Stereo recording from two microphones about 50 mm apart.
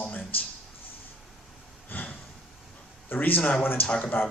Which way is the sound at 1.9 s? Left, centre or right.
Left.